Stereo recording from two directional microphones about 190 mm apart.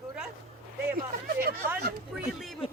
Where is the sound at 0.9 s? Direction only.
50° right (ahead or behind).